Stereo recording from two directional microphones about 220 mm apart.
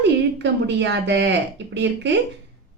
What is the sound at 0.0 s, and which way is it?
A woman's voice, 50° right (ahead or behind).